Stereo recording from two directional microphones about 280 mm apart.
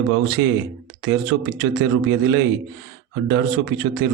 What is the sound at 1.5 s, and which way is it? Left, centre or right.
Speech, right.